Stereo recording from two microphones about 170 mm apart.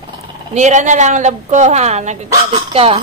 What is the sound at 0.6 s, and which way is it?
A woman's voice, 45° right (ahead or behind).